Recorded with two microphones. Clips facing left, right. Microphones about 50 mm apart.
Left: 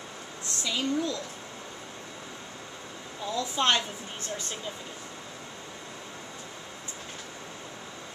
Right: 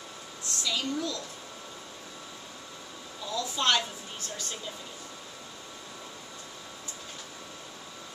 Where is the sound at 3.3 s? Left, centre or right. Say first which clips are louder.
Left 1 dB; left.